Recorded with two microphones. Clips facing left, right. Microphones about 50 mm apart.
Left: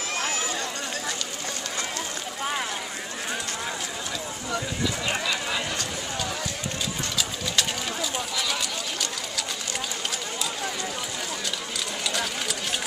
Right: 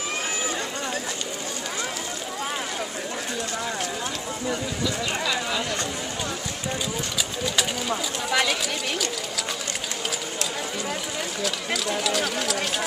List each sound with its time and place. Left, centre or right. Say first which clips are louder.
8.3 s run: right 7 dB; right